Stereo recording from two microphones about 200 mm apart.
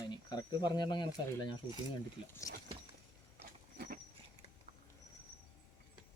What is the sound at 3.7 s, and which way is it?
Horse, 50° right (ahead or behind).